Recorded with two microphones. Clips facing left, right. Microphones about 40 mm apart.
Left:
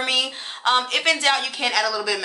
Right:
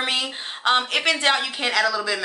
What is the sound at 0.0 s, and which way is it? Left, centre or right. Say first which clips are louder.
A woman's voice: left 2 dB; right.